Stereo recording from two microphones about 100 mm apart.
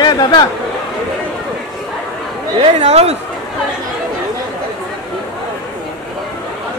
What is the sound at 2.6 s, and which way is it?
Speech, 90° right.